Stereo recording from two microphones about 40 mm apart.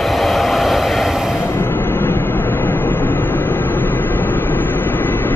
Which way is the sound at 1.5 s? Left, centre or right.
Left.